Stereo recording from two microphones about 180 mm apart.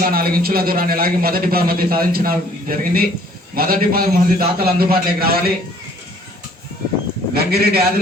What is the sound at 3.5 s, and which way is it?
Speech, 55° right (ahead or behind).